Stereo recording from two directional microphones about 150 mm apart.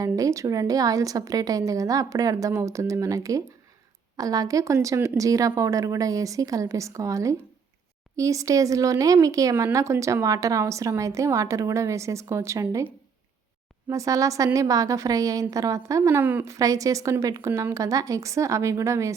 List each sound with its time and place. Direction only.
0.0 s a woman's voice: 20° right (ahead or behind)
13.9 s a woman's voice: 20° right (ahead or behind)